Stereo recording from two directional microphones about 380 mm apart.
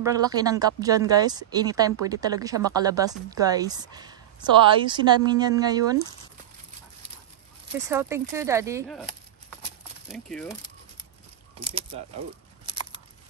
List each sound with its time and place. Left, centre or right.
0.2 s speech: centre
7.9 s speech: centre
10.0 s speech: centre
11.6 s speech: centre